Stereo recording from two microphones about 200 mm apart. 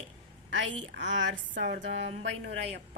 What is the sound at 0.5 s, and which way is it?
A woman's voice, 70° right (ahead or behind).